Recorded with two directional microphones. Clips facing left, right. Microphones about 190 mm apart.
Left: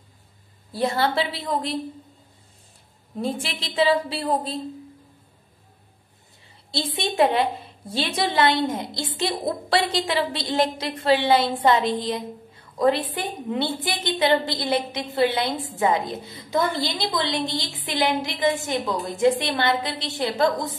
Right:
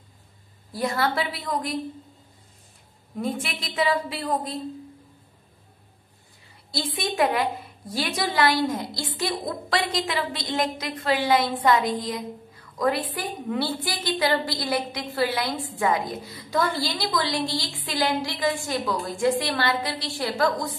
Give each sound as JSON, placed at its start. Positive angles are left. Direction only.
{"t": 0.7, "sound": "a woman's voice", "side_deg": 25}
{"t": 3.2, "sound": "a woman's voice", "side_deg": 30}
{"t": 6.7, "sound": "a woman's voice", "side_deg": 25}